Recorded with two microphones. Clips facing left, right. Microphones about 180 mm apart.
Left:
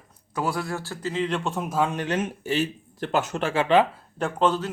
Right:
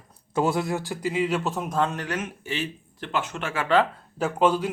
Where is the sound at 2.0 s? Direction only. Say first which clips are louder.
Left 4 dB; 30° left (ahead or behind).